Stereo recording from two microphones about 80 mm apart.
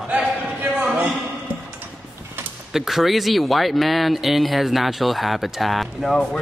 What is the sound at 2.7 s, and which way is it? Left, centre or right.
Speech, centre.